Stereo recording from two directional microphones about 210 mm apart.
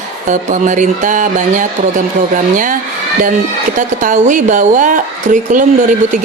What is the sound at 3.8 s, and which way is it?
Speech, 35° right (ahead or behind).